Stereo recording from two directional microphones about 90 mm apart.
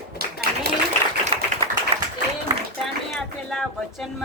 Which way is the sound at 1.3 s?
90° right.